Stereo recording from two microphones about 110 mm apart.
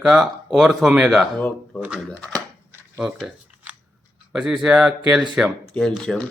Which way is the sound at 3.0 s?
5° right (ahead or behind).